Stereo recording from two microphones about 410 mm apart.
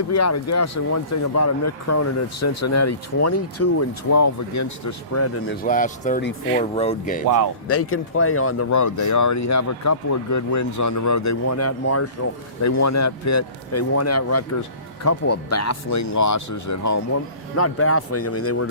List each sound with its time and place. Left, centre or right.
0.1 s speech: left
5.6 s speech: centre
7.3 s speech: right
7.7 s speech: left
17.6 s speech: left